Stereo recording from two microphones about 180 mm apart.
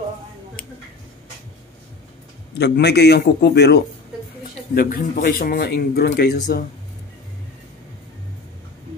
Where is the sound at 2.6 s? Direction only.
65° left (ahead or behind).